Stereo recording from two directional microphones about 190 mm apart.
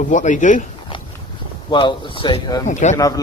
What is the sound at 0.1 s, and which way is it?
Speech, 40° left (ahead or behind).